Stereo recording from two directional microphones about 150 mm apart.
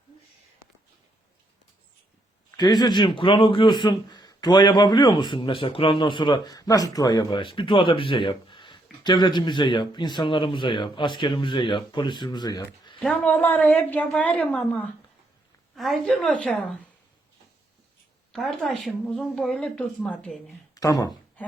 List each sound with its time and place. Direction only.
2.6 s speech: 30° left (ahead or behind)
13.0 s a woman's voice: 5° left (ahead or behind)
18.3 s speech: centre (ahead or behind)
20.7 s speech: 25° left (ahead or behind)
21.4 s speech: 10° left (ahead or behind)